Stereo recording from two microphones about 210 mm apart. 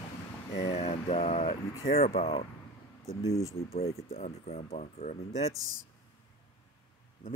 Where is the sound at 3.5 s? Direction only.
30° left (ahead or behind).